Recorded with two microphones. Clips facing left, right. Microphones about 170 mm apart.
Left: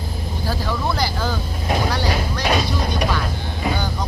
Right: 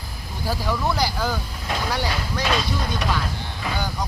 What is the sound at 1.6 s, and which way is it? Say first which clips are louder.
Vehicle: left 7 dB; 25° left (ahead or behind).